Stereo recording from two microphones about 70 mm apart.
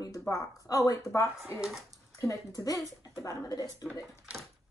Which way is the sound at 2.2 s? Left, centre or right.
Left.